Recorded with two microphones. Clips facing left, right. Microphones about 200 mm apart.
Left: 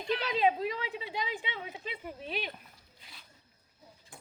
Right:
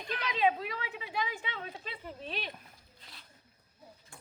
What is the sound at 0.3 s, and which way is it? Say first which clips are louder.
A woman's voice: even; 30° left (ahead or behind).